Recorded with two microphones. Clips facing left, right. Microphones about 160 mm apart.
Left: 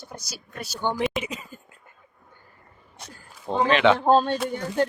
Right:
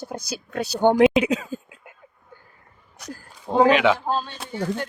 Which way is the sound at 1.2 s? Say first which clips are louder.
Right 12 dB; 85° right.